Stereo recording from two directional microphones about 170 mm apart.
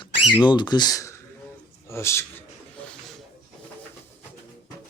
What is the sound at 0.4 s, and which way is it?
A man's voice, 25° left (ahead or behind).